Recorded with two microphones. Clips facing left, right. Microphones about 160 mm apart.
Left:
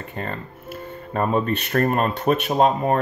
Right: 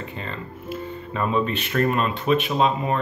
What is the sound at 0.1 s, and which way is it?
Speech, 50° left (ahead or behind).